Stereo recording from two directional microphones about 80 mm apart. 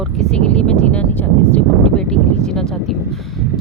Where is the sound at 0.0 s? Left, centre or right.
Centre.